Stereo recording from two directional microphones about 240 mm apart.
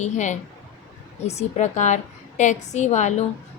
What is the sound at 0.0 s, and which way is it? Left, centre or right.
A woman's voice, left.